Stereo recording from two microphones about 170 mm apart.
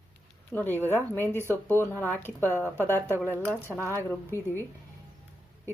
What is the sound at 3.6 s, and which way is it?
Speech, 10° right (ahead or behind).